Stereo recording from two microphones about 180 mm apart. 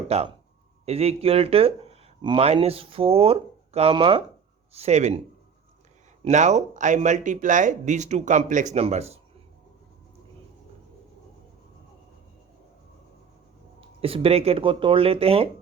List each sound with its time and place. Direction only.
0.1 s speech: 35° right (ahead or behind)
6.2 s speech: 40° right (ahead or behind)
14.0 s speech: 30° right (ahead or behind)